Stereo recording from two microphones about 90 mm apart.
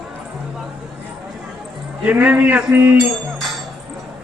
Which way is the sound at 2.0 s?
15° right (ahead or behind).